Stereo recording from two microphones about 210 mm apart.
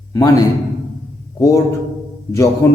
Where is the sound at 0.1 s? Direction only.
20° left (ahead or behind).